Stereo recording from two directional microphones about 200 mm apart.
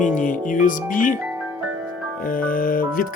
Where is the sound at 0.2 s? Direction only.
40° left (ahead or behind).